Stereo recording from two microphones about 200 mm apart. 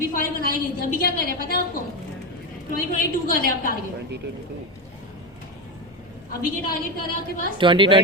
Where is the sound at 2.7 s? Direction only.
45° left (ahead or behind).